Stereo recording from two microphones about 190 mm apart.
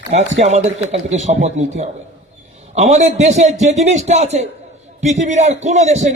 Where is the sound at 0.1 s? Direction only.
35° right (ahead or behind).